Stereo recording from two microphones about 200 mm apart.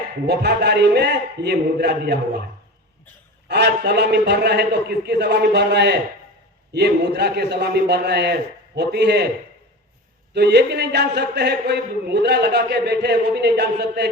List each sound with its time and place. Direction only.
0.3 s a man's voice: 55° right (ahead or behind)
3.5 s a man's voice: 55° right (ahead or behind)
10.3 s a man's voice: 55° right (ahead or behind)